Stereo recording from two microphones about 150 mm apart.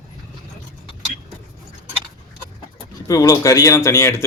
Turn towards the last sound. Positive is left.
turn(degrees=20)  # may be behind; listen again after turning